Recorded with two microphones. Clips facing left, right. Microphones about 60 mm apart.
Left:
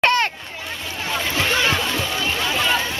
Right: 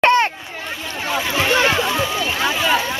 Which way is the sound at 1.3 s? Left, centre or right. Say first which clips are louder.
Right 4 dB; right.